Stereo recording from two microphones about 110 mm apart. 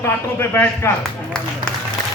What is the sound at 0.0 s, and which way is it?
Speech, 20° left (ahead or behind).